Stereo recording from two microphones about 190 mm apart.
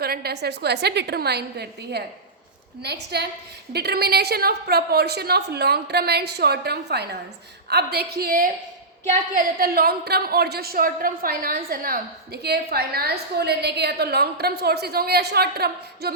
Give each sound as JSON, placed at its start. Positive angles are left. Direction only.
{"t": 0.0, "sound": "a woman's voice", "side_deg": -55}